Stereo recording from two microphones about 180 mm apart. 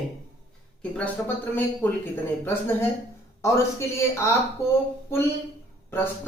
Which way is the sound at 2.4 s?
15° left (ahead or behind).